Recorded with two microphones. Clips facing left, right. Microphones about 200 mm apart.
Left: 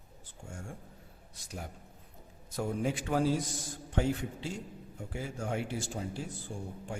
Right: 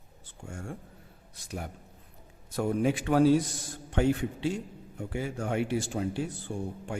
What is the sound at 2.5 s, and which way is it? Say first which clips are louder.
Speech: right 6 dB; 65° right (ahead or behind).